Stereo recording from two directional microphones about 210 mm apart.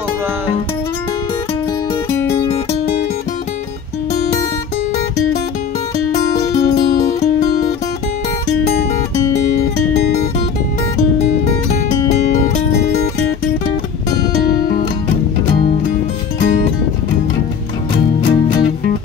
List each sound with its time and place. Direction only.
6.6 s music: 50° left (ahead or behind)
7.2 s music: 35° left (ahead or behind)
18.2 s music: 20° left (ahead or behind)